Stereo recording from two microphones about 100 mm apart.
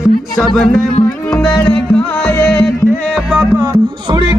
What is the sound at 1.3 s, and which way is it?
Music, 10° left (ahead or behind).